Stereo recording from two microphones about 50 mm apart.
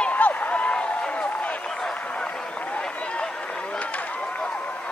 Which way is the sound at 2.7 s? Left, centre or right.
Centre.